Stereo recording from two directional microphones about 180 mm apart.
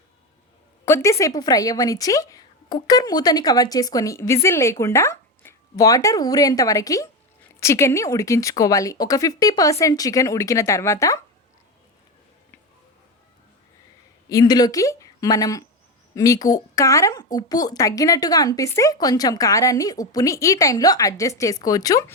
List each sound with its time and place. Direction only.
0.9 s a woman's voice: 15° left (ahead or behind)
14.3 s a woman's voice: 20° left (ahead or behind)